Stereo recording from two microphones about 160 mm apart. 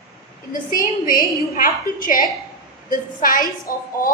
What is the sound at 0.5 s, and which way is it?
A woman's voice, 60° left (ahead or behind).